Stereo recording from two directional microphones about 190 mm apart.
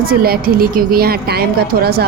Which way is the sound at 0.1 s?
50° right (ahead or behind).